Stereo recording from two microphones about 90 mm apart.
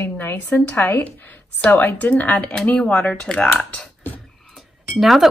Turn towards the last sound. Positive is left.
turn(degrees=0)  # may be behind; listen again after turning